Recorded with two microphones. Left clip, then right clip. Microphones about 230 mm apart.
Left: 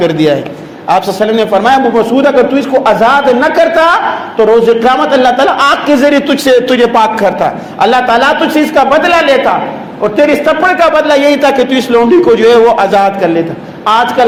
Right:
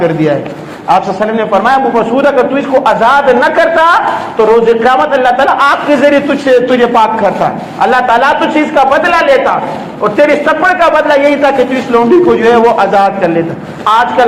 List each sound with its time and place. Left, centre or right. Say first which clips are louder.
0.0 s a man's voice: left 1 dB; left